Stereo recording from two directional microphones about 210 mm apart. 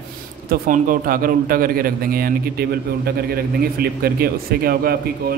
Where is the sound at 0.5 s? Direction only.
40° right (ahead or behind).